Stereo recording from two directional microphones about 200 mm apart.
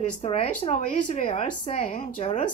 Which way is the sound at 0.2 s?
35° left (ahead or behind).